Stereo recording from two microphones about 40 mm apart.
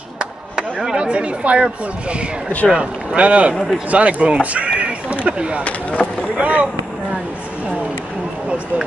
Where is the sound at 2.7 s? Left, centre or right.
Right.